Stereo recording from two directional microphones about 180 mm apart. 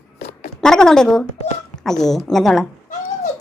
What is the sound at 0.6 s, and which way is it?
A woman's voice, 5° left (ahead or behind).